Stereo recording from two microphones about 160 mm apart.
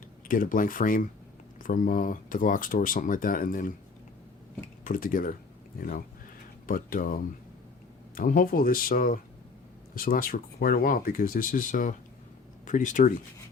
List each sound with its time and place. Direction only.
0.3 s speech: 60° left (ahead or behind)
4.8 s speech: 55° left (ahead or behind)
6.7 s speech: 60° left (ahead or behind)